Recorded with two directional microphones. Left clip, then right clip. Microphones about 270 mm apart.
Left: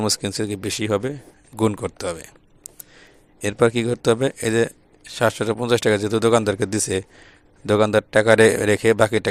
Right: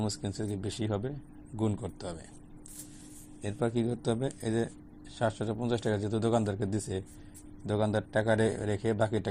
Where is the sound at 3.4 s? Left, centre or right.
Left.